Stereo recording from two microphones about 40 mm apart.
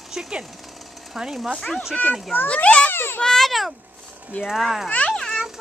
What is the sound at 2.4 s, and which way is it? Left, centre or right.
Speech, left.